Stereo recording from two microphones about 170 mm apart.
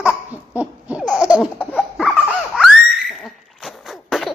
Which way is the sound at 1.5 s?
5° left (ahead or behind).